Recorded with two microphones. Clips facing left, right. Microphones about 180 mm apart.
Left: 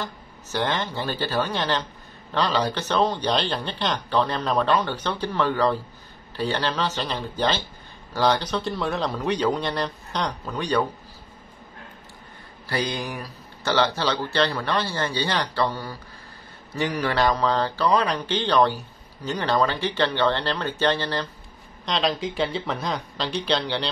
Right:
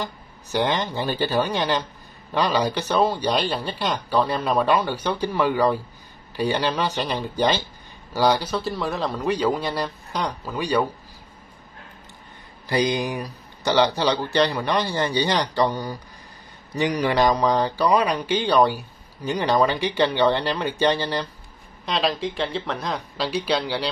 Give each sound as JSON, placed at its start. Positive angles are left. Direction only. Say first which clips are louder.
{"t": 0.0, "sound": "a man's voice", "louder": "right 2 dB", "side_deg": -15}
{"t": 12.6, "sound": "speech", "louder": "right 5 dB", "side_deg": -15}
{"t": 21.8, "sound": "a man's voice", "louder": "right 1 dB", "side_deg": 0}